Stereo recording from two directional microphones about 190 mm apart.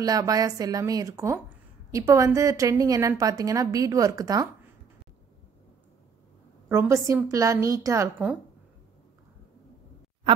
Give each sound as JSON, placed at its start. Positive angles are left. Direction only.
{"t": 0.0, "sound": "a woman's voice", "side_deg": -20}
{"t": 6.7, "sound": "a woman's voice", "side_deg": -15}